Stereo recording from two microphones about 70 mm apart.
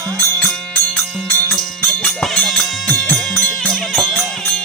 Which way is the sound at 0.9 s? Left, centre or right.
Left.